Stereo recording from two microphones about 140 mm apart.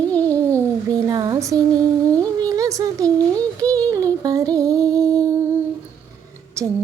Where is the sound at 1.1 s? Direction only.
25° right (ahead or behind).